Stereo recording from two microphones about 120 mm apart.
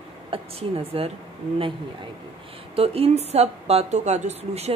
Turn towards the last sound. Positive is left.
turn(degrees=-65)  # may be behind; listen again after turning